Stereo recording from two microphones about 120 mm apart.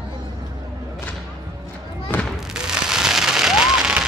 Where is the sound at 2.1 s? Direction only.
15° left (ahead or behind).